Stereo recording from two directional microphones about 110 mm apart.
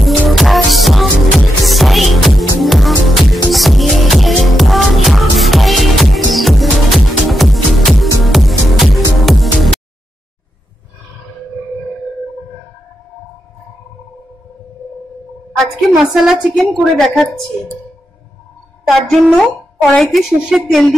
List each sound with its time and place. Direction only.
0.0 s music: centre (ahead or behind)
15.6 s a woman's voice: 5° right (ahead or behind)
18.9 s a woman's voice: 5° left (ahead or behind)